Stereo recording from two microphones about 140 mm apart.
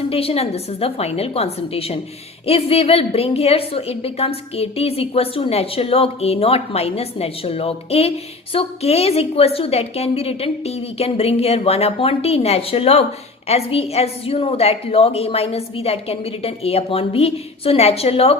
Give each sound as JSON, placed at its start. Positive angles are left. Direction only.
{"t": 0.1, "sound": "a woman's voice", "side_deg": 45}